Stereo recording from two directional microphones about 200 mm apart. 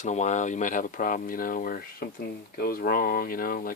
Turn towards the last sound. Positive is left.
turn(degrees=45)  # may be behind; listen again after turning